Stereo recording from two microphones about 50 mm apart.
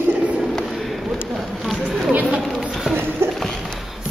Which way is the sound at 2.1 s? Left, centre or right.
Right.